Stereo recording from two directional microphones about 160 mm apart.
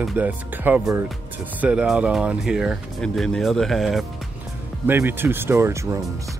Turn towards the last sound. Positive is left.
turn(degrees=-15)  # may be behind; listen again after turning